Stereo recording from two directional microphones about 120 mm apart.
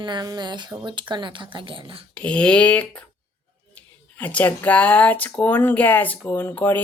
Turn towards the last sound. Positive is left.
turn(degrees=15)  # may be behind; listen again after turning